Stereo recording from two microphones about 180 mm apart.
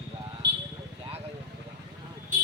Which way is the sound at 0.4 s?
70° right (ahead or behind).